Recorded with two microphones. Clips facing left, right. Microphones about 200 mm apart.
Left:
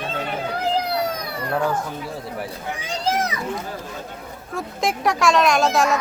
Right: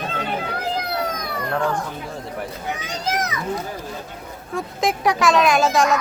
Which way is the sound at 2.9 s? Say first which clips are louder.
Left 4 dB; 30° left (ahead or behind).